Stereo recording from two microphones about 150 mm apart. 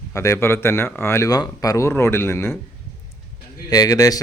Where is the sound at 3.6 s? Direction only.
25° left (ahead or behind).